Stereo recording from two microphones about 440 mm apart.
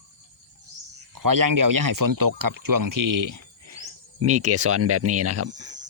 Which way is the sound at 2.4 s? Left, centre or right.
Right.